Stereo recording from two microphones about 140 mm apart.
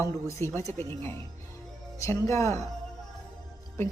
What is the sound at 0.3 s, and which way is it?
Speech, 20° left (ahead or behind).